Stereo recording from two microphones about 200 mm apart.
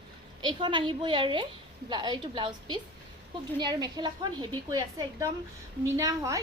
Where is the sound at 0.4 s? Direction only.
25° right (ahead or behind).